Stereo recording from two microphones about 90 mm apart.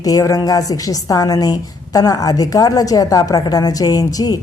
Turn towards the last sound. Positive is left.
turn(degrees=45)  # may be behind; listen again after turning